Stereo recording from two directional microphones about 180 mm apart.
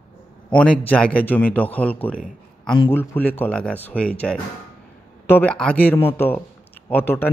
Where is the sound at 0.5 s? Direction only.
5° left (ahead or behind).